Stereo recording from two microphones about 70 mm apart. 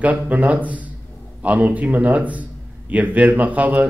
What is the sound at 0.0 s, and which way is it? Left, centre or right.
A man's voice, right.